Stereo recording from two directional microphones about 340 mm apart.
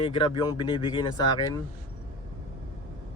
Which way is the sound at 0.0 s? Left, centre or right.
Centre.